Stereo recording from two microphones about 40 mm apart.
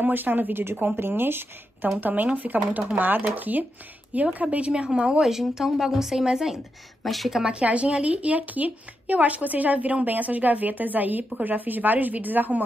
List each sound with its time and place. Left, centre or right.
0.0 s speech: right
2.0 s a woman's voice: right
5.2 s speech: centre
7.1 s speech: centre
7.5 s a woman's voice: right